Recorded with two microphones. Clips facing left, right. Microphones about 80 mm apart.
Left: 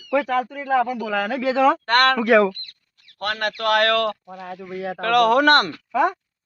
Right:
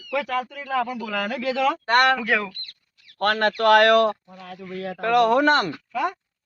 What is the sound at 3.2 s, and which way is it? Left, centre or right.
Speech, right.